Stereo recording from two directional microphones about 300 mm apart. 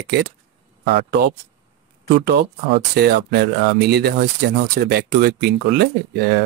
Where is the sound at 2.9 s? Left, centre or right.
Right.